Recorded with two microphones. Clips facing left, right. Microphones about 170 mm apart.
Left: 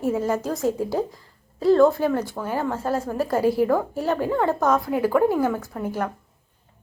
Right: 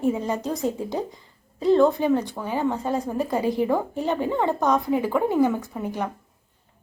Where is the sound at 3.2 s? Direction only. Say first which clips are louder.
Left 7 dB; 15° right (ahead or behind).